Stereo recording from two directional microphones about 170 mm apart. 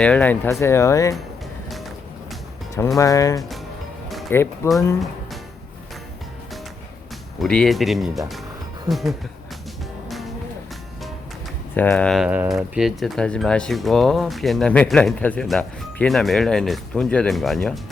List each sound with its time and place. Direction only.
0.0 s speech: 10° left (ahead or behind)
3.0 s speech: 20° left (ahead or behind)
7.3 s speech: 5° left (ahead or behind)
10.1 s music: centre (ahead or behind)
11.7 s speech: 10° left (ahead or behind)